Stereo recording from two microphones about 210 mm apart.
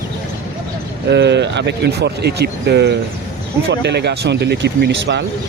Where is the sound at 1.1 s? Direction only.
55° right (ahead or behind).